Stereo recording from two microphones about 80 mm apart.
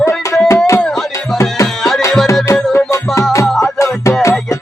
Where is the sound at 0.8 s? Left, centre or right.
Centre.